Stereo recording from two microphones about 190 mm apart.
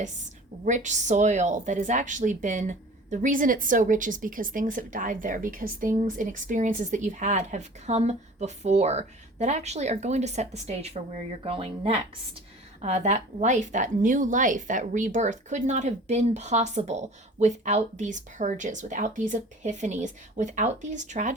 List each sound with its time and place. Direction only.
0.6 s a woman's voice: 40° right (ahead or behind)